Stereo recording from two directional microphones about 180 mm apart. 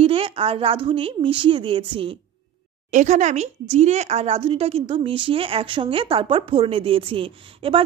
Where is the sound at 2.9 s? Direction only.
45° right (ahead or behind).